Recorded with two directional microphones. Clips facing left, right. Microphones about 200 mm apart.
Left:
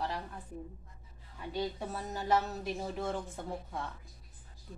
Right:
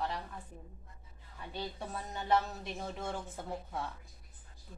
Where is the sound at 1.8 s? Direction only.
5° left (ahead or behind).